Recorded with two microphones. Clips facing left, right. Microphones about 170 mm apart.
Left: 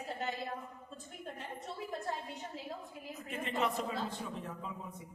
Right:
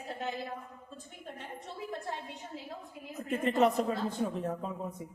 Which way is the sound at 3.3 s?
45° right (ahead or behind).